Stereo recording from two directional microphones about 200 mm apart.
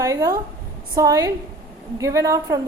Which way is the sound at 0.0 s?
15° right (ahead or behind).